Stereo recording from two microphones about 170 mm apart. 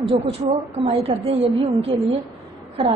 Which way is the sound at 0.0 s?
35° right (ahead or behind).